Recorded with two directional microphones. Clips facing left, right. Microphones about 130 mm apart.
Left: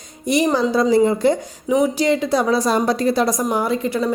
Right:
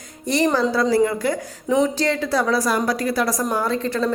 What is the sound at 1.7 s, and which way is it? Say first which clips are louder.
A woman's voice: left 2 dB; 10° left (ahead or behind).